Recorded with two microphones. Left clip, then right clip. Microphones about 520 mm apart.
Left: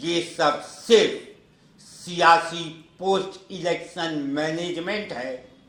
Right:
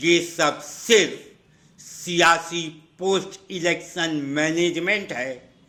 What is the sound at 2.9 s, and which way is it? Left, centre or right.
A man's voice, right.